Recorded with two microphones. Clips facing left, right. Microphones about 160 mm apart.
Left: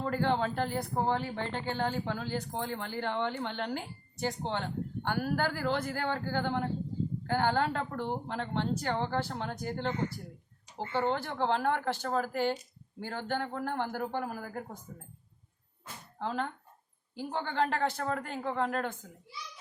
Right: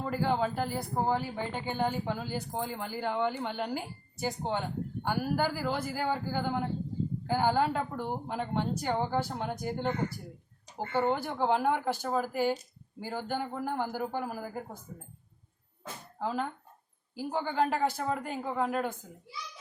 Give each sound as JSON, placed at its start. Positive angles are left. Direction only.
{"t": 0.0, "sound": "speech", "side_deg": -5}
{"t": 10.9, "sound": "speech", "side_deg": -10}
{"t": 16.1, "sound": "speech", "side_deg": -5}